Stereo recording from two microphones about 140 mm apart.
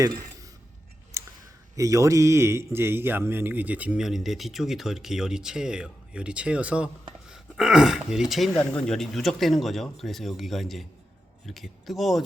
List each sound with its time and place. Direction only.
1.1 s clicking: 20° right (ahead or behind)
1.7 s a man's voice: 25° right (ahead or behind); by 12.2 s centre (ahead or behind)